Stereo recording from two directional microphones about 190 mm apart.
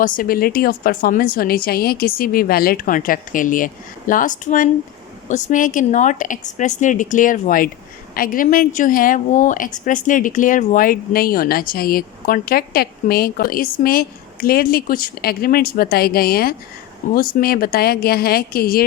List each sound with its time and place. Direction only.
0.0 s a woman's voice: 50° left (ahead or behind)